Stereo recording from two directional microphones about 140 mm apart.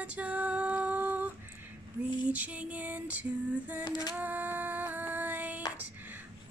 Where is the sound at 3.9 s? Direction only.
30° left (ahead or behind).